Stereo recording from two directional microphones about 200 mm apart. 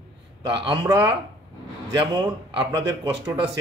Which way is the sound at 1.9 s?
20° right (ahead or behind).